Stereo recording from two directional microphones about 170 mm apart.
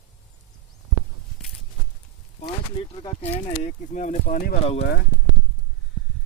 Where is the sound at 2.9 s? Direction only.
30° left (ahead or behind).